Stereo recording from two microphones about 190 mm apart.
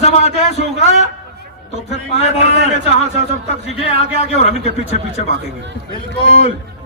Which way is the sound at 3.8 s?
30° left (ahead or behind).